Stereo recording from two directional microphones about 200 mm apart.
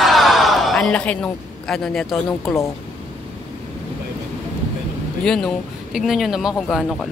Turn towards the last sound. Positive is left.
turn(degrees=0)  # may be behind; listen again after turning